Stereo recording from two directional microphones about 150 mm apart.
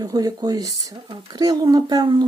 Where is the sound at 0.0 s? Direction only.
25° right (ahead or behind).